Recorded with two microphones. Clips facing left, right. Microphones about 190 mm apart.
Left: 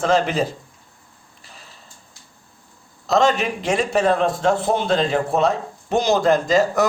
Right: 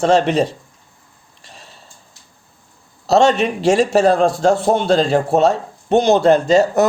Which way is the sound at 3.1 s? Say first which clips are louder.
Right 4 dB; 35° right (ahead or behind).